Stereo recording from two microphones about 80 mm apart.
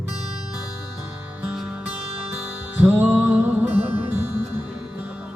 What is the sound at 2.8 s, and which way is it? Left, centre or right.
Music, right.